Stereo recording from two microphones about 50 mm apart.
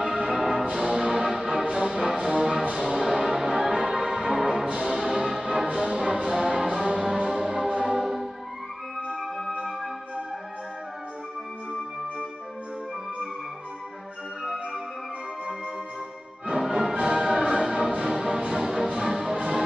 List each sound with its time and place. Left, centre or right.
0.0 s music: centre
6.0 s music: centre
6.3 s music: centre
16.5 s music: centre